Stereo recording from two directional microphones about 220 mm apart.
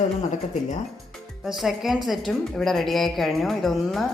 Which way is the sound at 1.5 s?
Centre (ahead or behind).